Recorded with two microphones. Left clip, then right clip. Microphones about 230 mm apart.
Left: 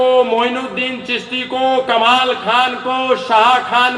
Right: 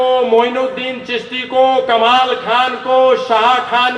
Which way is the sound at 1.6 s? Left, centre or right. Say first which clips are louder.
Right 3 dB; left.